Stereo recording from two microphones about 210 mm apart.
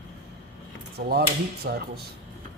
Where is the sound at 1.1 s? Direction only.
45° right (ahead or behind).